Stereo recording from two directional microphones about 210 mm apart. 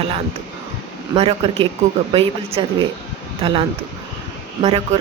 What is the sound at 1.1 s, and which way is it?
A woman's voice, 25° right (ahead or behind).